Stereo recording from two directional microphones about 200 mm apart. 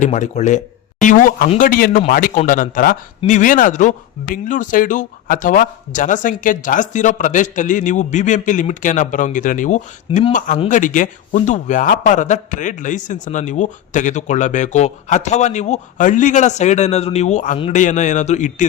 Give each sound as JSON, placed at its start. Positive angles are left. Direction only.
{"t": 0.0, "sound": "speech", "side_deg": 35}
{"t": 10.1, "sound": "speech", "side_deg": 25}
{"t": 10.3, "sound": "speech", "side_deg": 40}